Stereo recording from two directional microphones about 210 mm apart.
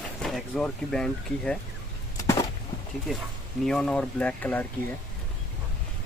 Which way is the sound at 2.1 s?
15° left (ahead or behind).